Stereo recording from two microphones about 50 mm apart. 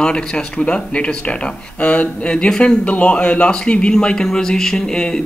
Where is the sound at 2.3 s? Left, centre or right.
Centre.